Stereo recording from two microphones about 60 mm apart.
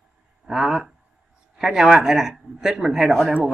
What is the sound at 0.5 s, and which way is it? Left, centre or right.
Speech, centre.